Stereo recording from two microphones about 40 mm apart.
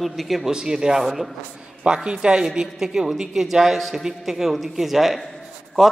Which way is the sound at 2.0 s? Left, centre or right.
Right.